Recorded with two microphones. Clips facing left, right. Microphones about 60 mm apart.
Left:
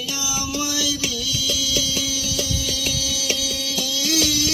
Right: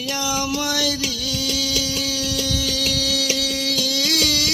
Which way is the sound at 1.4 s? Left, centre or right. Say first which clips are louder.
Right 1 dB; right.